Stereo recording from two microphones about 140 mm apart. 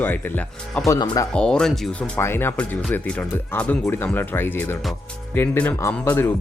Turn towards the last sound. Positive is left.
turn(degrees=15)  # may be behind; listen again after turning